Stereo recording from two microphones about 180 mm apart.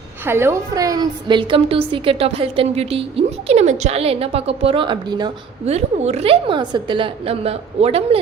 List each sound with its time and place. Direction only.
0.3 s a woman's voice: 15° right (ahead or behind)
5.6 s a woman's voice: 35° right (ahead or behind)